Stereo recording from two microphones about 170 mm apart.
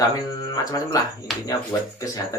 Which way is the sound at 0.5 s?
20° left (ahead or behind).